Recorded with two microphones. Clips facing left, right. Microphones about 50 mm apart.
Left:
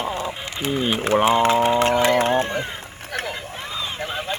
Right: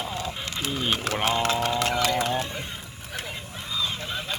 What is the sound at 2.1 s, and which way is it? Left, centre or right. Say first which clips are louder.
Music: left 7 dB; left.